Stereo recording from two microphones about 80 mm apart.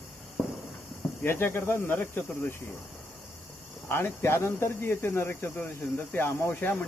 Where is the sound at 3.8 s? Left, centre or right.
Left.